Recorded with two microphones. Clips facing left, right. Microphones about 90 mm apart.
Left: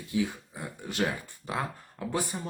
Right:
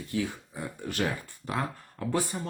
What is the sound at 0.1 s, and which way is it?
Speech, 15° left (ahead or behind).